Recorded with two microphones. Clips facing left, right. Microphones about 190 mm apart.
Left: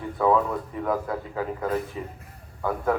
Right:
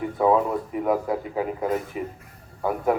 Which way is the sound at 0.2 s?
20° right (ahead or behind).